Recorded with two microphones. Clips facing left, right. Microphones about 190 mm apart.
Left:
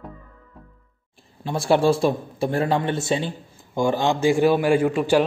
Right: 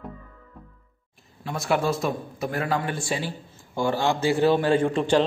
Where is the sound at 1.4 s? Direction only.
30° left (ahead or behind).